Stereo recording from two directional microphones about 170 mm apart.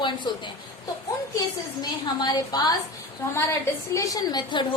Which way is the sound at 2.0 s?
25° left (ahead or behind).